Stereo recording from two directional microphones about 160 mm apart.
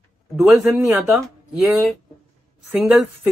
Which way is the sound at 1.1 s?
Centre (ahead or behind).